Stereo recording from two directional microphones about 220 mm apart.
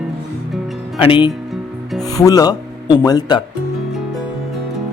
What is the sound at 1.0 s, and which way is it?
Speech, 20° left (ahead or behind).